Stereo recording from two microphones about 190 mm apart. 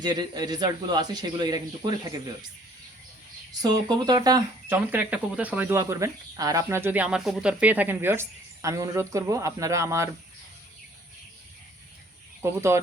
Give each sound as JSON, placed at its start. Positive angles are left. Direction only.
{"t": 0.0, "sound": "a man's voice", "side_deg": -20}
{"t": 3.6, "sound": "speech", "side_deg": -20}
{"t": 12.4, "sound": "speech", "side_deg": -15}